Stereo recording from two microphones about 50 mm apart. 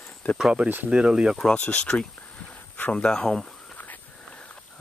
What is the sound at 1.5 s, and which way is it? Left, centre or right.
Speech, left.